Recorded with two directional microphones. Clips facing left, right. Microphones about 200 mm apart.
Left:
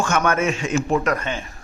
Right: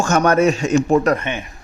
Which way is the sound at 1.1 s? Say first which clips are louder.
Right 4 dB; 20° right (ahead or behind).